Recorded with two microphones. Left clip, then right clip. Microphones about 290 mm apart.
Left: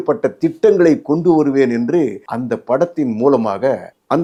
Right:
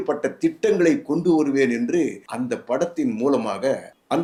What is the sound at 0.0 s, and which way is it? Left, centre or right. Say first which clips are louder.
Speech: left 6 dB; left.